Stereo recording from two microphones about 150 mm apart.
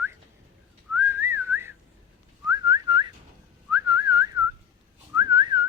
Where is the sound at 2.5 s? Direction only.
25° right (ahead or behind).